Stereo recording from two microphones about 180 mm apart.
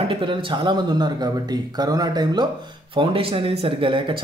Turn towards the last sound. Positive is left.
turn(degrees=-30)  # may be behind; listen again after turning